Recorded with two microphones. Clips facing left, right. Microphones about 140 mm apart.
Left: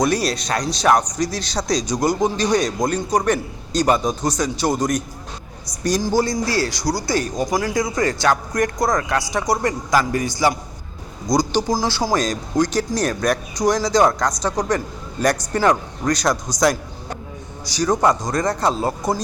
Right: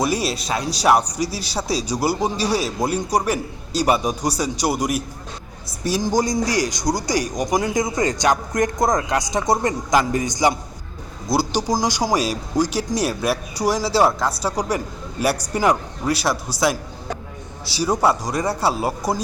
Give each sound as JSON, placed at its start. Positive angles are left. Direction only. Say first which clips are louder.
{"t": 0.0, "sound": "speech", "louder": "left 2 dB", "side_deg": -5}
{"t": 17.7, "sound": "speech", "louder": "left 1 dB", "side_deg": -10}